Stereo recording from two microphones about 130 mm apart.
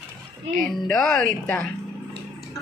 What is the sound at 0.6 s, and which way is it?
A woman's voice, 5° left (ahead or behind).